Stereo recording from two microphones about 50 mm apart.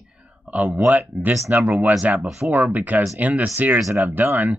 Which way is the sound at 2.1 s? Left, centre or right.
Centre.